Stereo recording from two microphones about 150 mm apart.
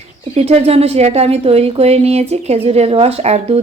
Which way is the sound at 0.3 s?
40° right (ahead or behind).